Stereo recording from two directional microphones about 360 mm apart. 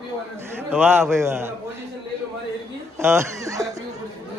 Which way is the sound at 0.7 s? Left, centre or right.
Centre.